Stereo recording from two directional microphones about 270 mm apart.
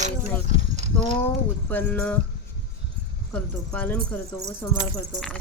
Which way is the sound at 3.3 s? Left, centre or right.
Centre.